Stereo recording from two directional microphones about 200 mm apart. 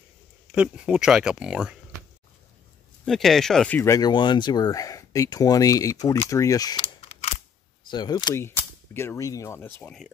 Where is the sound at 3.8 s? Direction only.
15° left (ahead or behind).